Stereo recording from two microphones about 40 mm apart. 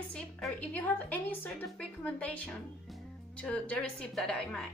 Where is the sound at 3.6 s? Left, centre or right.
Left.